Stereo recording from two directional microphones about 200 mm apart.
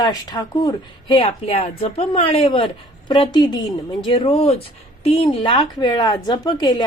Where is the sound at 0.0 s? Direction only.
20° left (ahead or behind).